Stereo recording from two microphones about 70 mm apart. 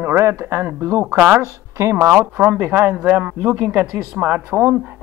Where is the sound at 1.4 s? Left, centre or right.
Right.